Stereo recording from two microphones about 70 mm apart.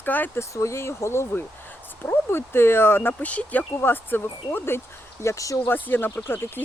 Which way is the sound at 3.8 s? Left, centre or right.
Left.